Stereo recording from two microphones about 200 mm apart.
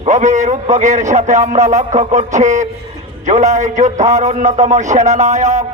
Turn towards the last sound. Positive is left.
turn(degrees=-35)  # may be behind; listen again after turning